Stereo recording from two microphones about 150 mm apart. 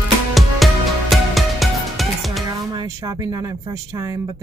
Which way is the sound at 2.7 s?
25° right (ahead or behind).